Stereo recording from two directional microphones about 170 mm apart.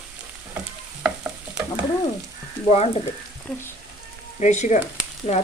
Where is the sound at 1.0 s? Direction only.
5° right (ahead or behind).